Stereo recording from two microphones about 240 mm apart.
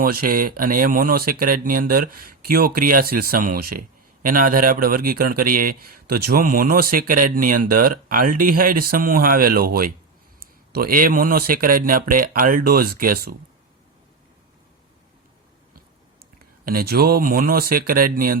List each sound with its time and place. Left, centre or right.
0.2 s speech: right
16.6 s speech: right